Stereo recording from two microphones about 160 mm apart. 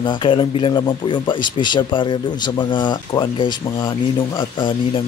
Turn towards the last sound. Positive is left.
turn(degrees=30)  # may be behind; listen again after turning